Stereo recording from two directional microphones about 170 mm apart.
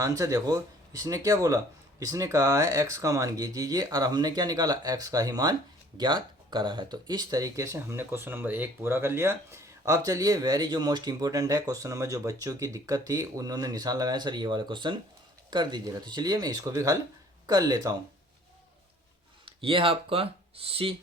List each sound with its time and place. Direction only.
0.0 s speech: 20° right (ahead or behind)
19.5 s speech: 30° right (ahead or behind)